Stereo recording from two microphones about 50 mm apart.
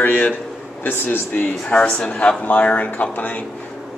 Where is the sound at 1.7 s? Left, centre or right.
Left.